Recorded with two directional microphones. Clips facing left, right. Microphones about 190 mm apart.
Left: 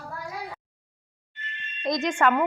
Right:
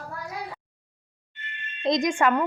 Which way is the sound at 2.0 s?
10° right (ahead or behind).